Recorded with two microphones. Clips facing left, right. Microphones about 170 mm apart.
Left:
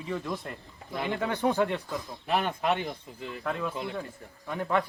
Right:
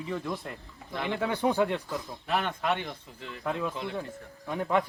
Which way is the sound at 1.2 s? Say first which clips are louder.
Right 1 dB; 10° right (ahead or behind).